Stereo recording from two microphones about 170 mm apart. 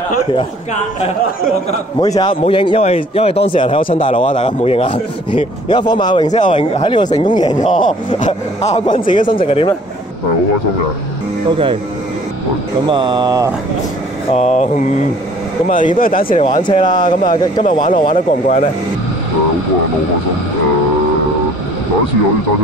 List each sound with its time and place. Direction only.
2.0 s a man's voice: 25° left (ahead or behind)
6.2 s speech: 45° left (ahead or behind)
6.5 s a man's voice: 35° left (ahead or behind)
7.5 s speech: 50° left (ahead or behind)
9.3 s a man's voice: 30° left (ahead or behind)
11.5 s speech: 30° right (ahead or behind)
12.8 s speech: 25° right (ahead or behind)
14.3 s a man's voice: 40° left (ahead or behind); by 16.3 s 55° left (ahead or behind)
16.3 s a man's voice: 30° left (ahead or behind)
17.6 s a man's voice: 50° left (ahead or behind)